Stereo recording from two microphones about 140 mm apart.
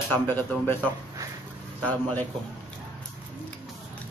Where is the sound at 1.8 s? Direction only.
10° left (ahead or behind).